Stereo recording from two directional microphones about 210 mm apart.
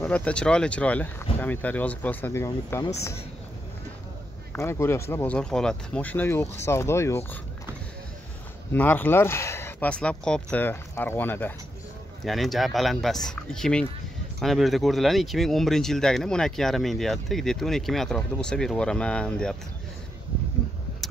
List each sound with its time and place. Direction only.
0.0 s speech: 5° left (ahead or behind)
4.5 s speech: 10° left (ahead or behind)
8.7 s speech: 10° left (ahead or behind)